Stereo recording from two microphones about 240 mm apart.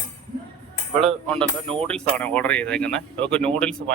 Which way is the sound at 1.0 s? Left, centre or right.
Centre.